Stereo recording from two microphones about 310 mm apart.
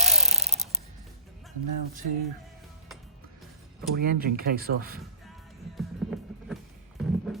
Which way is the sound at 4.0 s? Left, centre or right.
Right.